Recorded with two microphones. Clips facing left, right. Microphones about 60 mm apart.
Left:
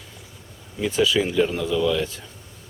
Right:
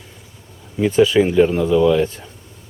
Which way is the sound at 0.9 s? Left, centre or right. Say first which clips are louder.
Right 7 dB; right.